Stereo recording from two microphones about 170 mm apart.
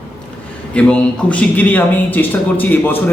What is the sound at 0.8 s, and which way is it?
Speech, 5° left (ahead or behind).